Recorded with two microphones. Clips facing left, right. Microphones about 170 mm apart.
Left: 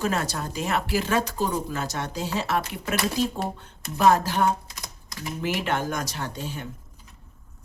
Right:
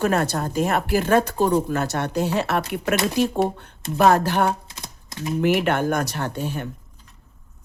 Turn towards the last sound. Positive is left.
turn(degrees=-60)  # may be behind; listen again after turning